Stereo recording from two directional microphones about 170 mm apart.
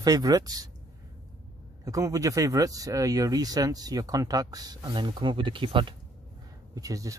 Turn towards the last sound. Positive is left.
turn(degrees=-20)  # may be behind; listen again after turning